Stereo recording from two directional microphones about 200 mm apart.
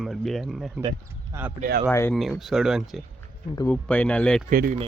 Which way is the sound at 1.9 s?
10° left (ahead or behind).